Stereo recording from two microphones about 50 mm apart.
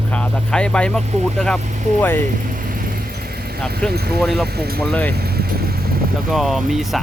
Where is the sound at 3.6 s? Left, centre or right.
Centre.